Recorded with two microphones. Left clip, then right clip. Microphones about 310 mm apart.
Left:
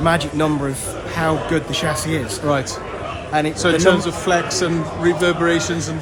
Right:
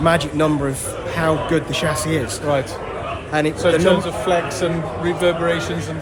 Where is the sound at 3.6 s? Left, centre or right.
Left.